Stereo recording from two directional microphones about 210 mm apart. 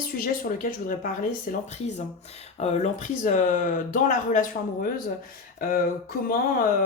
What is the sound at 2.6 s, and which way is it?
Speech, 30° left (ahead or behind).